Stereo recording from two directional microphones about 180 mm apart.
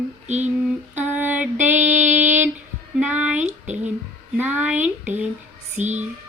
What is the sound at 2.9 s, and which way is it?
Music, 5° right (ahead or behind).